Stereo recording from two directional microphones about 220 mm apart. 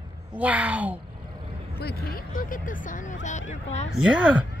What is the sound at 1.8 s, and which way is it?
Speech, 45° left (ahead or behind).